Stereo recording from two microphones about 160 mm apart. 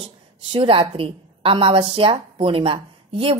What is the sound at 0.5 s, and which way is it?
A woman's voice, 35° right (ahead or behind).